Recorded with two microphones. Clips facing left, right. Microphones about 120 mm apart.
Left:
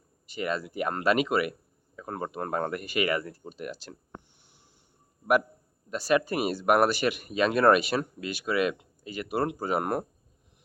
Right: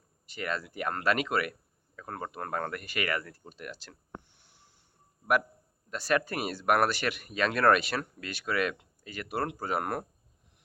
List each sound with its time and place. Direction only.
0.3 s speech: 15° left (ahead or behind)
4.4 s a sound: 15° left (ahead or behind)
5.9 s speech: 10° left (ahead or behind)